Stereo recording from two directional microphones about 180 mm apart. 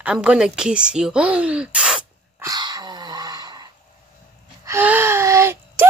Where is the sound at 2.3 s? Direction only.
20° right (ahead or behind).